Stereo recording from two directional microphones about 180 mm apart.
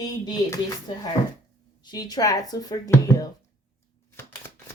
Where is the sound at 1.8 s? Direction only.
20° left (ahead or behind).